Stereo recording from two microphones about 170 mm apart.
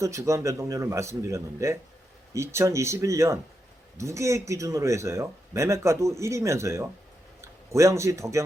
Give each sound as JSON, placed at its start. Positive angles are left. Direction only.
{"t": 0.0, "sound": "speech", "side_deg": -20}